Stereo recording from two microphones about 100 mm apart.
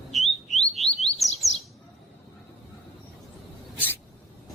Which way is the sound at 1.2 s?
Centre (ahead or behind).